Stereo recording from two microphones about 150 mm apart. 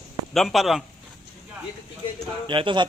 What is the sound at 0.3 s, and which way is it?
Speech, centre (ahead or behind).